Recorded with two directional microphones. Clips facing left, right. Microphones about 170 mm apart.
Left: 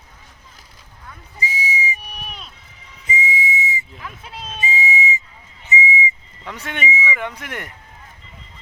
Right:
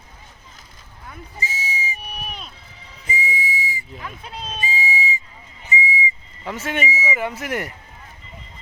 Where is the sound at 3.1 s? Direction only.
20° left (ahead or behind).